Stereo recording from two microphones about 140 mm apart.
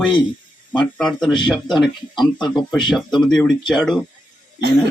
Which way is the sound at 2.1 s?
30° left (ahead or behind).